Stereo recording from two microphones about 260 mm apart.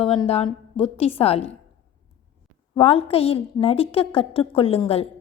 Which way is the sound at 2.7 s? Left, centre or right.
Left.